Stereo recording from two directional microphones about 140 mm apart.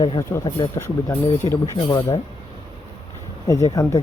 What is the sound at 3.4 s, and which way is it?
Speech, 25° left (ahead or behind).